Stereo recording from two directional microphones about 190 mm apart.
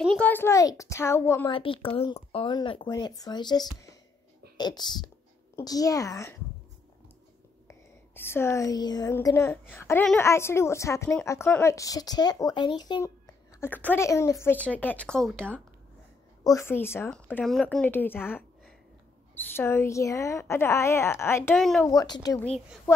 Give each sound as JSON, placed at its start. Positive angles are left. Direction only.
{"t": 0.0, "sound": "a child's voice", "side_deg": 5}
{"t": 1.5, "sound": "speech", "side_deg": 30}
{"t": 7.6, "sound": "a woman's voice", "side_deg": 10}
{"t": 19.5, "sound": "speech", "side_deg": 10}
{"t": 21.5, "sound": "a woman's voice", "side_deg": 0}
{"t": 21.8, "sound": "speech", "side_deg": 20}